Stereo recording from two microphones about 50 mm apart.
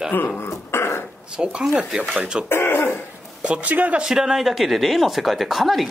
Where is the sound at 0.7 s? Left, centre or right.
Left.